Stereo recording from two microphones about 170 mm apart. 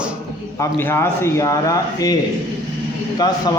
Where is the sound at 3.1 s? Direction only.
25° left (ahead or behind).